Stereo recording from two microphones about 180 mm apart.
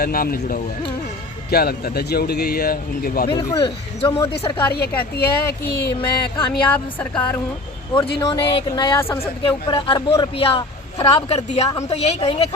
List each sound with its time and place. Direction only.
0.0 s a man's voice: 55° left (ahead or behind)
3.2 s speech: 20° left (ahead or behind)
4.7 s a man's voice: 60° left (ahead or behind)
6.5 s a woman's voice: 5° left (ahead or behind)
8.2 s speech: 25° left (ahead or behind)
9.4 s a woman's voice: 30° left (ahead or behind)